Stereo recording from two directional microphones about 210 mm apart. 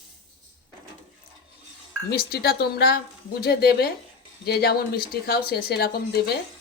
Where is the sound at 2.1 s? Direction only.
45° left (ahead or behind).